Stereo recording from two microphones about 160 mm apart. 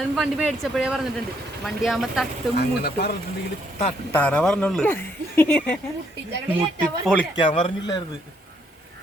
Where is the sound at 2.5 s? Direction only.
90° left.